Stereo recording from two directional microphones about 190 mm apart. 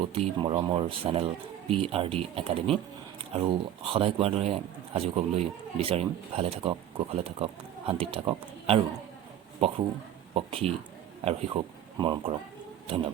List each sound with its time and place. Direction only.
0.0 s speech: 30° right (ahead or behind)
3.8 s speech: 30° right (ahead or behind)